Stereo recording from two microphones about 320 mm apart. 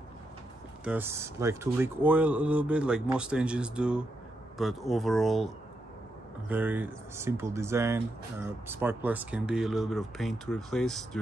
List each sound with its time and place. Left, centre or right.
0.8 s speech: centre
6.5 s speech: centre